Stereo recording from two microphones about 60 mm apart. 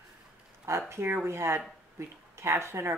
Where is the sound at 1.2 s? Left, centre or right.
Right.